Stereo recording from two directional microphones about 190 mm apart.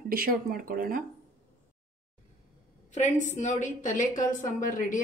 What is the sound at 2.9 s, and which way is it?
A woman's voice, 40° left (ahead or behind).